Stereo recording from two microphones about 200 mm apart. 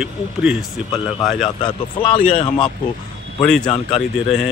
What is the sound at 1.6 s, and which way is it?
Speech, 25° left (ahead or behind).